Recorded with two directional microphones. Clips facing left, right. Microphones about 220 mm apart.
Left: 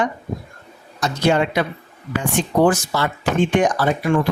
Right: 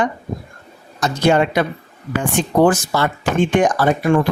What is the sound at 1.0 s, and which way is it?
Speech, 50° right (ahead or behind).